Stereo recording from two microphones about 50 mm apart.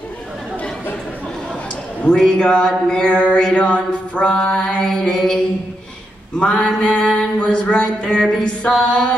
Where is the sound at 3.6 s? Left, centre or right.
Left.